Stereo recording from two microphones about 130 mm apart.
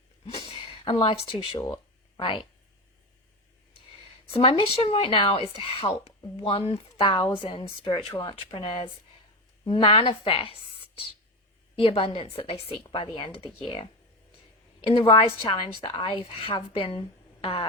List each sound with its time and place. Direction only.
0.3 s speech: 40° left (ahead or behind)
1.5 s a sound: 35° left (ahead or behind)
4.3 s a woman's voice: 50° left (ahead or behind)
11.8 s a woman's voice: 45° left (ahead or behind)
15.0 s a woman's voice: 40° left (ahead or behind)
17.4 s a sound: 45° left (ahead or behind)